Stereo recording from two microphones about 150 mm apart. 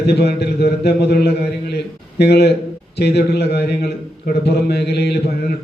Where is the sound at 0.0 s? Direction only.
90° left.